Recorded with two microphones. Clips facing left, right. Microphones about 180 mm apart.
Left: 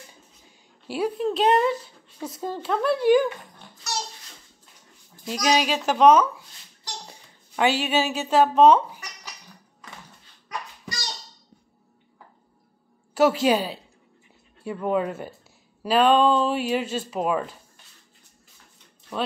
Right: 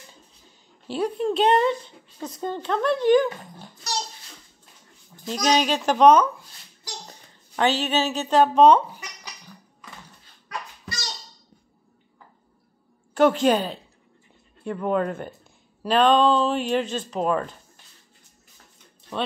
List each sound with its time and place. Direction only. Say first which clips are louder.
0.8 s a woman's voice: right 1 dB; 5° left (ahead or behind)
3.3 s dog: even; 35° right (ahead or behind)
5.2 s a woman's voice: right 1 dB; 5° left (ahead or behind)
13.1 s a woman's voice: right 1 dB; 5° left (ahead or behind)